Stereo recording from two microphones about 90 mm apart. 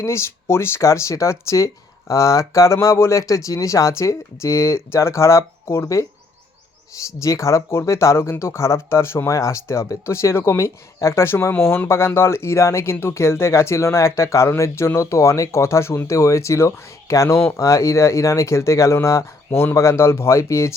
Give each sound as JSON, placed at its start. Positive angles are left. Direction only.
{"t": 0.0, "sound": "speech", "side_deg": 30}